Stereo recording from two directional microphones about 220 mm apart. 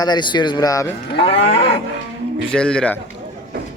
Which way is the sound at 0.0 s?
20° left (ahead or behind).